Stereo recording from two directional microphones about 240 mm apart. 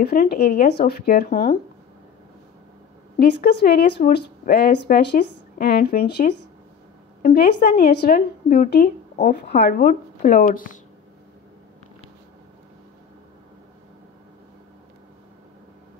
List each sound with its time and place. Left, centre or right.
0.0 s speech: left
3.2 s speech: left
7.2 s speech: left